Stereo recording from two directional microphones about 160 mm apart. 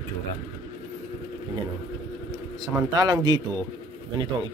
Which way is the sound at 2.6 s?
25° right (ahead or behind).